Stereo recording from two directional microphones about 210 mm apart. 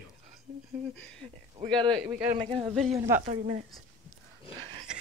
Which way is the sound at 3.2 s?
30° right (ahead or behind).